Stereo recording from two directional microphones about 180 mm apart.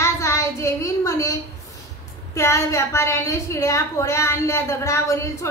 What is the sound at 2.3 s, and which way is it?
A woman's voice, 15° left (ahead or behind).